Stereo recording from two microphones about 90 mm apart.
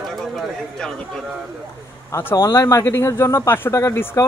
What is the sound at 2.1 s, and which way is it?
Speech, 30° left (ahead or behind).